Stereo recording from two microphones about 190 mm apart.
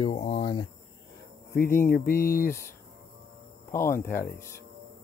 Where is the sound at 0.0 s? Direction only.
30° left (ahead or behind).